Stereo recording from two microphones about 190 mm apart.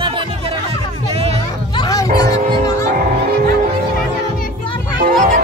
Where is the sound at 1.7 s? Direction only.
20° left (ahead or behind).